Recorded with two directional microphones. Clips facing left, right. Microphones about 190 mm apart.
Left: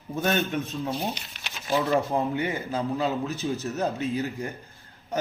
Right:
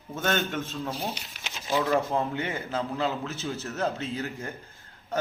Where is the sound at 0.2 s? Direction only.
15° left (ahead or behind).